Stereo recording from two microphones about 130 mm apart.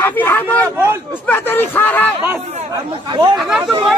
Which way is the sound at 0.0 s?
15° left (ahead or behind).